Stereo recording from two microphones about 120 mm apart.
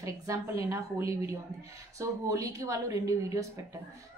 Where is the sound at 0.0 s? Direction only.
25° right (ahead or behind).